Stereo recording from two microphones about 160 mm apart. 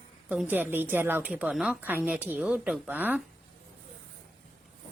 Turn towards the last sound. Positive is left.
turn(degrees=-10)  # may be behind; listen again after turning